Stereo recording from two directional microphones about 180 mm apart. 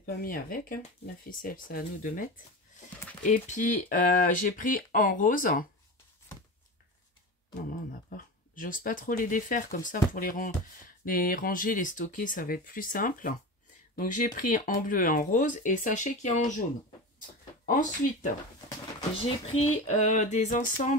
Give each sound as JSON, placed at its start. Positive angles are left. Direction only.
{"t": 0.0, "sound": "speech", "side_deg": 50}
{"t": 8.1, "sound": "speech", "side_deg": 50}
{"t": 17.6, "sound": "speech", "side_deg": 45}
{"t": 18.9, "sound": "a sound", "side_deg": 30}